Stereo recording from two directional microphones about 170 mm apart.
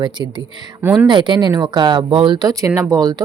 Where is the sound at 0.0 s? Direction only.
25° right (ahead or behind).